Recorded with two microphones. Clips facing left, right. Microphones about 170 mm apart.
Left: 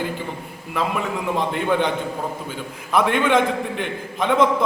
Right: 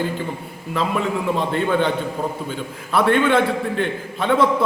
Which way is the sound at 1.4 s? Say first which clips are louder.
Left 1 dB; 15° left (ahead or behind).